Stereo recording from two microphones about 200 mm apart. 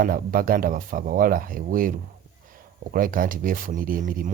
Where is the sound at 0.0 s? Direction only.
45° right (ahead or behind).